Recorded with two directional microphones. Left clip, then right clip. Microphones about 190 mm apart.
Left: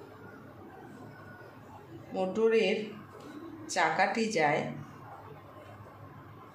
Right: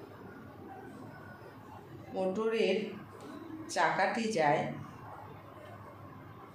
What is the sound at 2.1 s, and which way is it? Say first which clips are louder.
A woman's voice: left 5 dB; 35° left (ahead or behind).